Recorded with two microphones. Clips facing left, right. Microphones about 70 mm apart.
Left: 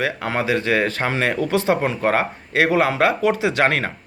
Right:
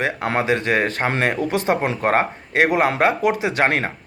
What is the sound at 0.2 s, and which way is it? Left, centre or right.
Speech, right.